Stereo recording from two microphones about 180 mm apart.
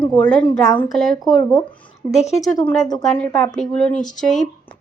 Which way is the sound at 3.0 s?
5° left (ahead or behind).